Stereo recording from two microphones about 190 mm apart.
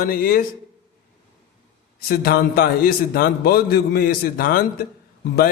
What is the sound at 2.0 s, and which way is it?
A man's voice, 50° left (ahead or behind).